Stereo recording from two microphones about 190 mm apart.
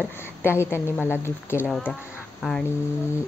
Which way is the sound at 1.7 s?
Centre (ahead or behind).